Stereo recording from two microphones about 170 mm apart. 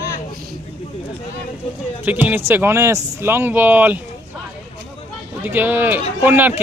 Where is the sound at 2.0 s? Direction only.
10° right (ahead or behind).